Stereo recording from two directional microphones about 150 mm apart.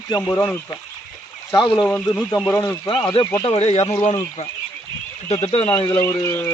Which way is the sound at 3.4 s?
45° left (ahead or behind).